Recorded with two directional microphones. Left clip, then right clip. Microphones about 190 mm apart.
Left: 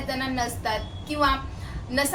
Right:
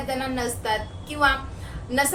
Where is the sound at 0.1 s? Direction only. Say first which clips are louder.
Even; centre (ahead or behind).